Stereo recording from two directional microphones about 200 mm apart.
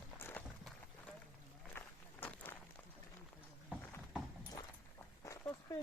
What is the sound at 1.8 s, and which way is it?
Run, 10° left (ahead or behind).